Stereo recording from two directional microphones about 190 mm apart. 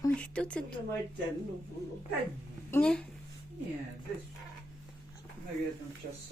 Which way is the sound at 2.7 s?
5° left (ahead or behind).